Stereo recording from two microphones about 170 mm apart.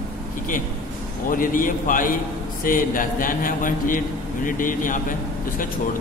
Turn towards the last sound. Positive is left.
turn(degrees=50)  # may be behind; listen again after turning